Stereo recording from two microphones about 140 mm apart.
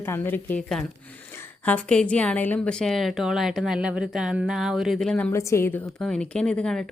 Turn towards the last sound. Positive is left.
turn(degrees=5)  # may be behind; listen again after turning